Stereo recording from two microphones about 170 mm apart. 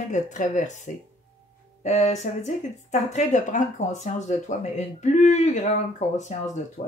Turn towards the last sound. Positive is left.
turn(degrees=45)  # may be behind; listen again after turning